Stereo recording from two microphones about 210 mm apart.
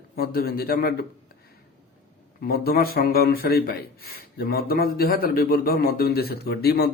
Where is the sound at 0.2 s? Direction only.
45° left (ahead or behind).